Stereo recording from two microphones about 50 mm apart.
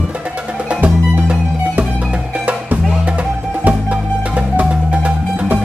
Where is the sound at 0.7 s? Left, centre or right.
Right.